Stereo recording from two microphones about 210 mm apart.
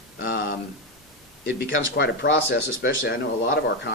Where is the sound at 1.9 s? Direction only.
55° left (ahead or behind).